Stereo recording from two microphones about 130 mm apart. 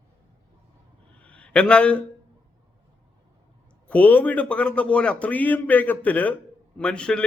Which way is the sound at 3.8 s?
10° left (ahead or behind).